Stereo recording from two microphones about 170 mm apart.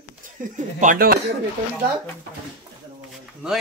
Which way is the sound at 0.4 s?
50° right (ahead or behind).